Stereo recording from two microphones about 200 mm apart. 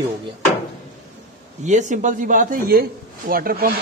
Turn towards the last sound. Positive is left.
turn(degrees=-45)  # may be behind; listen again after turning